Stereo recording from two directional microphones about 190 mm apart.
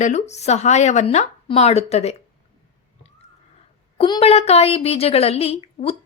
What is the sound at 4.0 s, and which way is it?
A woman's voice, 30° left (ahead or behind).